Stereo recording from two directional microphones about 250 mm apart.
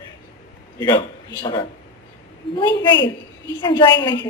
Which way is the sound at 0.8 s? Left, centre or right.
Centre.